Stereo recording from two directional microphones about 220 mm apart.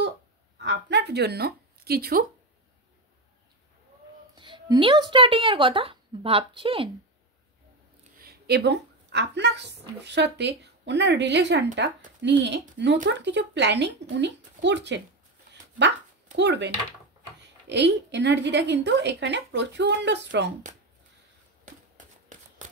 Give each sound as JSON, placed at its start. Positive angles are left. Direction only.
{"t": 0.6, "sound": "a sound", "side_deg": -50}
{"t": 4.4, "sound": "speech", "side_deg": -20}
{"t": 8.2, "sound": "a woman's voice", "side_deg": -45}
{"t": 16.3, "sound": "a woman's voice", "side_deg": -50}